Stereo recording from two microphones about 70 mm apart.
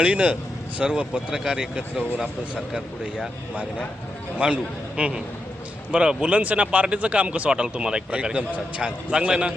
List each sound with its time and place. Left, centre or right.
0.0 s speech: centre